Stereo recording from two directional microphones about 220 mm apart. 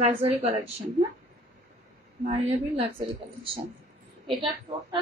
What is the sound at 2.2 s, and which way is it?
A woman's voice, 25° right (ahead or behind).